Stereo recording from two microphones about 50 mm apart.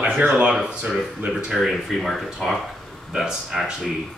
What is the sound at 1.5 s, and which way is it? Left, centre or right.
Speech, centre.